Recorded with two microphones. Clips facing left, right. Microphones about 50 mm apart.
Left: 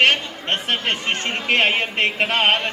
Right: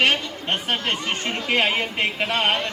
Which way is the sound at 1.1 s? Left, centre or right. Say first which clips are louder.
Left 3 dB; left.